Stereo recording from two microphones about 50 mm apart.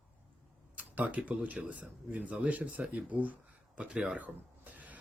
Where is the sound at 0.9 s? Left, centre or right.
Right.